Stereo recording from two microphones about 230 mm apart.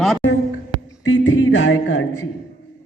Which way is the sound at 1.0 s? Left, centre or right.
Left.